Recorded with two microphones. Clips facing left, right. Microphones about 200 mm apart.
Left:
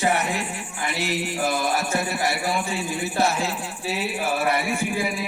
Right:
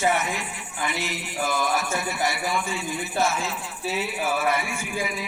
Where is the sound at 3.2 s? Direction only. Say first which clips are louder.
Left 2 dB; 35° left (ahead or behind).